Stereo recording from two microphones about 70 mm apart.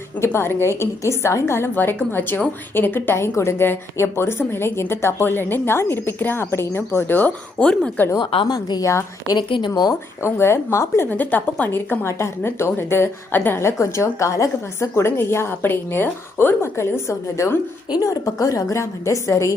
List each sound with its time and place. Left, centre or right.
0.3 s a woman's voice: left
7.6 s speech: centre
7.9 s a woman's voice: left
8.2 s a woman's voice: left
8.8 s a woman's voice: left
9.3 s a woman's voice: left
10.2 s a woman's voice: left
11.1 s a woman's voice: left
11.7 s a woman's voice: left
17.9 s a woman's voice: left